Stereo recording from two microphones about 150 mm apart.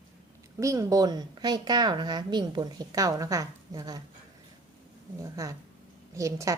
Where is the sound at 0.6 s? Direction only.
20° right (ahead or behind).